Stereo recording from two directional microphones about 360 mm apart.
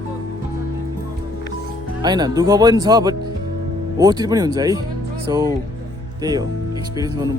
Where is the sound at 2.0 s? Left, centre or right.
Centre.